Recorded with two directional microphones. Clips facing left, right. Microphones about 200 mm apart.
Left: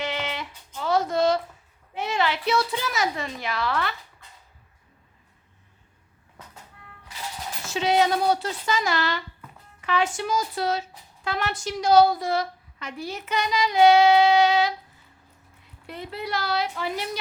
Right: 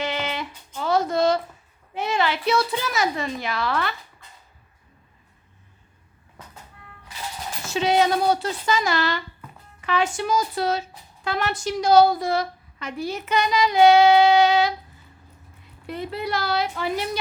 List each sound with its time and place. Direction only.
0.0 s a sound: 40° right (ahead or behind)
2.0 s speech: 45° right (ahead or behind)
7.7 s speech: 45° right (ahead or behind)
15.9 s speech: 50° right (ahead or behind)